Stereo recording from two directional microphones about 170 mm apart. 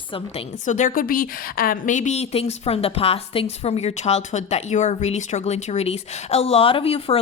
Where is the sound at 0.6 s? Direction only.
45° left (ahead or behind).